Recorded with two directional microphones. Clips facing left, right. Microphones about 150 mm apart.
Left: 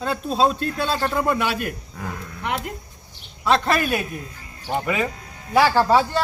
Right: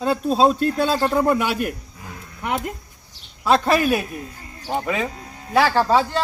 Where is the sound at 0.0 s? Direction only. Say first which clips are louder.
Right 3 dB; 10° right (ahead or behind).